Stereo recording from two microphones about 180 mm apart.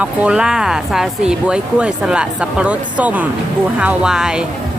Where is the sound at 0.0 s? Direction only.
5° right (ahead or behind).